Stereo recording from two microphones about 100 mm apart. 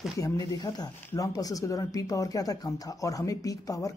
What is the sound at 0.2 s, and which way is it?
Speech, 40° left (ahead or behind).